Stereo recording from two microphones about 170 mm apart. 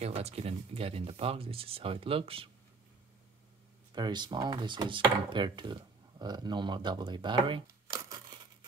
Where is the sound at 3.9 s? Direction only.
25° right (ahead or behind).